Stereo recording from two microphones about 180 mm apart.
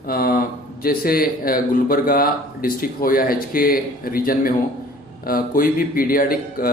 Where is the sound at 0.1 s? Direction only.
55° left (ahead or behind).